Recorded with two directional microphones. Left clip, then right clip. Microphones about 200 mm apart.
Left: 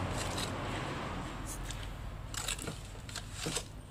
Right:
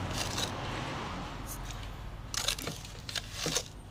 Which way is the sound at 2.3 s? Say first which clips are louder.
Right 6 dB; 40° right (ahead or behind).